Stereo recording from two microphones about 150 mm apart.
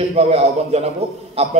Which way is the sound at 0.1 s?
45° right (ahead or behind).